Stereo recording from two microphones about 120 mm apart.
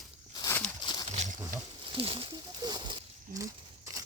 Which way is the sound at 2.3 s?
35° right (ahead or behind).